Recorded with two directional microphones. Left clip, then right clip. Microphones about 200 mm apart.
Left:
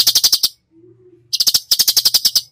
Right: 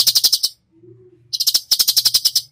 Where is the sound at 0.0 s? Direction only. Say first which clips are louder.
Left 2 dB; 30° left (ahead or behind).